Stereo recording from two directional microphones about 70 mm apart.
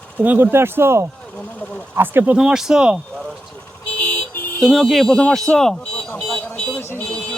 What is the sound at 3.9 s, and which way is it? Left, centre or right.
Vehicle, left.